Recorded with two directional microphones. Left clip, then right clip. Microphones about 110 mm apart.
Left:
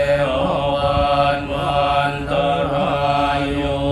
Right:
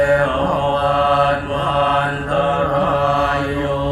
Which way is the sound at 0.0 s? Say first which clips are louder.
Right 2 dB; 35° left (ahead or behind).